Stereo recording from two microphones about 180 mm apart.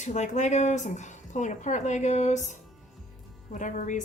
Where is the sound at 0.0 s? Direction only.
40° left (ahead or behind).